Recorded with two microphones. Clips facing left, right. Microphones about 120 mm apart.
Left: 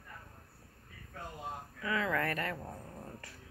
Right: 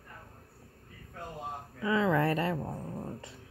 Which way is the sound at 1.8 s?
25° right (ahead or behind).